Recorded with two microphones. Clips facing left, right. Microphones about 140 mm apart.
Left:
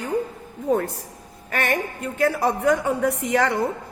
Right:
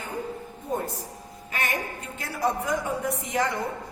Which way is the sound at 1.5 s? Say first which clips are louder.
Left 6 dB; 60° left (ahead or behind).